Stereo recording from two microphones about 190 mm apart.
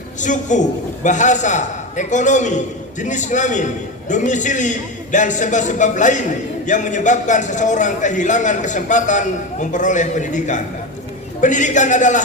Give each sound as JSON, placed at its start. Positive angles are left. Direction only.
{"t": 0.2, "sound": "a man's voice", "side_deg": 40}